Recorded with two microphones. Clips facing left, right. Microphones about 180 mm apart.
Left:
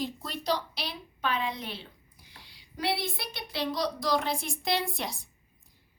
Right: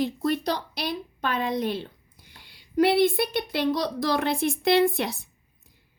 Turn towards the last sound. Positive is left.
turn(degrees=-60)  # may be behind; listen again after turning